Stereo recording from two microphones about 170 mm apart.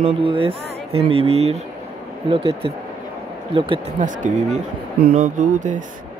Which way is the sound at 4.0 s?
50° right (ahead or behind).